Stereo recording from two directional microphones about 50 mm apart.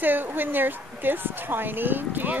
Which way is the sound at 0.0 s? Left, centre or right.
Right.